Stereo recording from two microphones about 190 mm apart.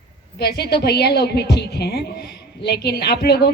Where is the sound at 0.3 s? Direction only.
60° left (ahead or behind).